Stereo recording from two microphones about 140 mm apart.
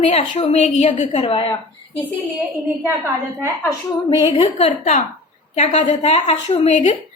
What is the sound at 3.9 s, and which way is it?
Speech, 40° left (ahead or behind).